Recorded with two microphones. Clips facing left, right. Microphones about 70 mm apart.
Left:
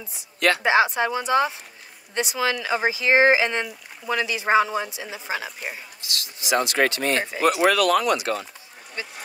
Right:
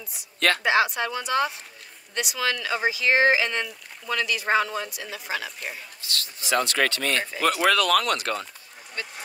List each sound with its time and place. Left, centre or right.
0.6 s speech: left; by 8.5 s centre